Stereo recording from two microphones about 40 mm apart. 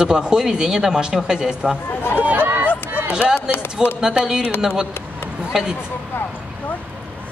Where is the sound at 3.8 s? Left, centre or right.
Centre.